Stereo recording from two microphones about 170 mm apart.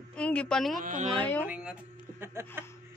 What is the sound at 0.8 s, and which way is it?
Speech, 50° right (ahead or behind).